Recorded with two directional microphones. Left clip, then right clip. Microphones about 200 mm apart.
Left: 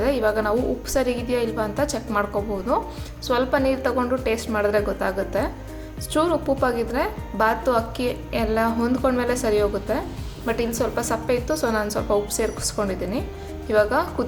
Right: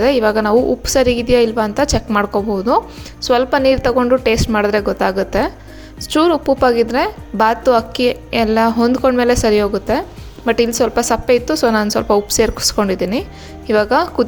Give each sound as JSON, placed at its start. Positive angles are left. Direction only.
{"t": 0.0, "sound": "a woman's voice", "side_deg": -40}